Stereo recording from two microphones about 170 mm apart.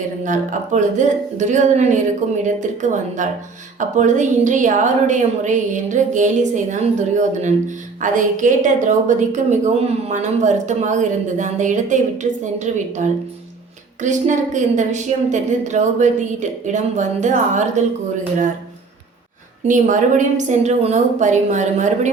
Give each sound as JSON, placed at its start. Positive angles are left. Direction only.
{"t": 0.3, "sound": "a woman's voice", "side_deg": -45}
{"t": 8.0, "sound": "a woman's voice", "side_deg": -50}
{"t": 19.6, "sound": "a woman's voice", "side_deg": -50}